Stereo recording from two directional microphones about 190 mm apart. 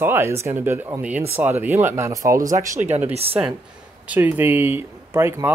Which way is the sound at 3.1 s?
30° right (ahead or behind).